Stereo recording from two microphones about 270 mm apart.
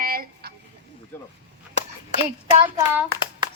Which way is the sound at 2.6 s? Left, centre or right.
Centre.